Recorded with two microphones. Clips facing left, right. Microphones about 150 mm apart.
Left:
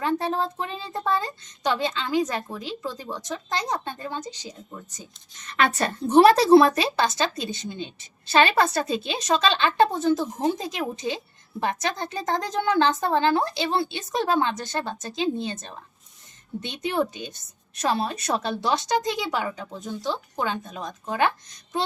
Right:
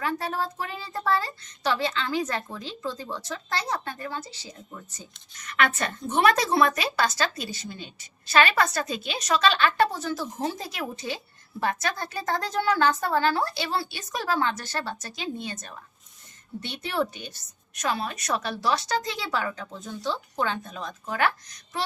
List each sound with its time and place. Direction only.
0.0 s a woman's voice: 25° left (ahead or behind)
5.4 s a woman's voice: 30° left (ahead or behind)